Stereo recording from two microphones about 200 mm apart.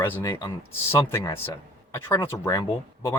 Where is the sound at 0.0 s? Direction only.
15° left (ahead or behind).